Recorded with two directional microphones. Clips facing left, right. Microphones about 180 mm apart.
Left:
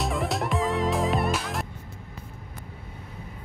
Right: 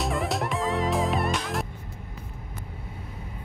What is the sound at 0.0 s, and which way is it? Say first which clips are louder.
Music: even; centre (ahead or behind).